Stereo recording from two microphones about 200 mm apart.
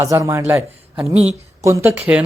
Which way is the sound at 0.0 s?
15° right (ahead or behind).